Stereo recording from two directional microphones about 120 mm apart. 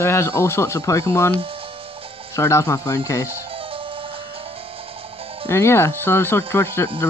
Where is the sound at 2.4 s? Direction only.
25° left (ahead or behind).